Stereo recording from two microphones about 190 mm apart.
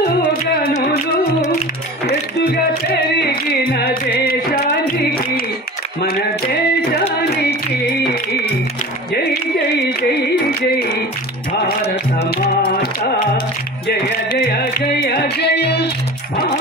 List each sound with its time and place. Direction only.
0.3 s music: 50° left (ahead or behind)
3.8 s music: 50° left (ahead or behind)
6.8 s a sound: 55° left (ahead or behind)
14.6 s music: 55° left (ahead or behind)